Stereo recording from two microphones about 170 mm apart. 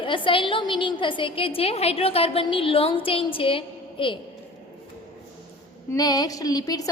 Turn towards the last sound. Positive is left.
turn(degrees=20)  # may be behind; listen again after turning